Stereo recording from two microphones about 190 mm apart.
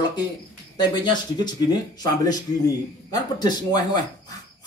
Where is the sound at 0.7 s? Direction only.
20° left (ahead or behind).